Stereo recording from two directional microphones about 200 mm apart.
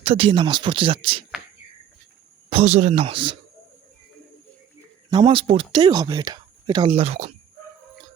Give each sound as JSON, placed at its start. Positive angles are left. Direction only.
{"t": 0.0, "sound": "speech", "side_deg": -30}
{"t": 2.5, "sound": "speech", "side_deg": -30}
{"t": 5.1, "sound": "speech", "side_deg": -25}